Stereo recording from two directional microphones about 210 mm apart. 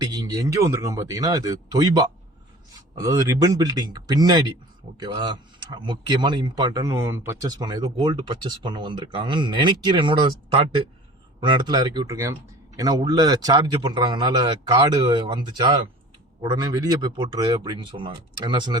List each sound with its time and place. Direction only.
0.0 s speech: 20° right (ahead or behind)
11.3 s speech: 20° right (ahead or behind)